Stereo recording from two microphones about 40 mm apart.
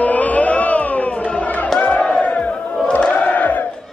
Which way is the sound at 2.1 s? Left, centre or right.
Left.